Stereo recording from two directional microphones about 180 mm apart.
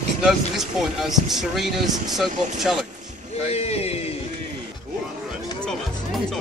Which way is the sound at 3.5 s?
35° left (ahead or behind).